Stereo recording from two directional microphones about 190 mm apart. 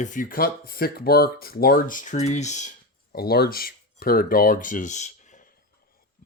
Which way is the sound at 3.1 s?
55° left (ahead or behind).